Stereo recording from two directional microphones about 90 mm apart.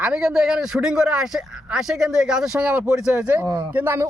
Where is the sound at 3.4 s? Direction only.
50° right (ahead or behind).